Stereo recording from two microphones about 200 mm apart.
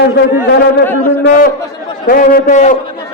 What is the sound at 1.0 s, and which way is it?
A man's voice, 45° left (ahead or behind).